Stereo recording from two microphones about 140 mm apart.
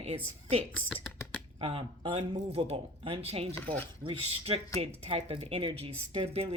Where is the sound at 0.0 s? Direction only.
45° right (ahead or behind).